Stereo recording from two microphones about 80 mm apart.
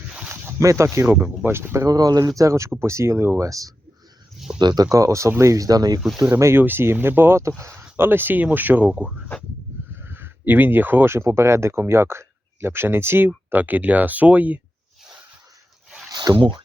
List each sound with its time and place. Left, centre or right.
0.1 s a sound: centre
0.4 s speech: right
1.0 s speech: centre
1.9 s speech: right
2.4 s speech: right
4.4 s a sound: centre
4.6 s speech: right
6.1 s speech: right
8.9 s speech: centre
9.9 s speech: right
16.1 s speech: right